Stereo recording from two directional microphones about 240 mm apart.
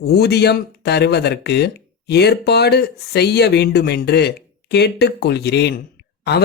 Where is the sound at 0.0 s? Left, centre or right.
Left.